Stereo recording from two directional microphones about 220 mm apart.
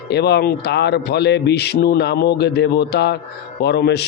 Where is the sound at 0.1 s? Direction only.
50° left (ahead or behind).